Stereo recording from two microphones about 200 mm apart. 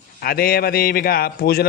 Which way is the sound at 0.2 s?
50° left (ahead or behind).